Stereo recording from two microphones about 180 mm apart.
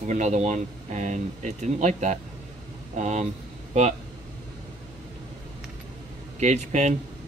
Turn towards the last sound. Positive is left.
turn(degrees=-40)  # may be behind; listen again after turning